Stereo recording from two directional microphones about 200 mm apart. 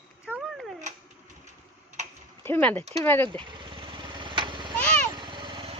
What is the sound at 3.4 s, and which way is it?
Vehicle, 25° right (ahead or behind).